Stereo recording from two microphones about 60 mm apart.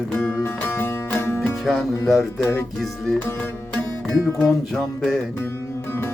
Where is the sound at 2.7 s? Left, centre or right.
Centre.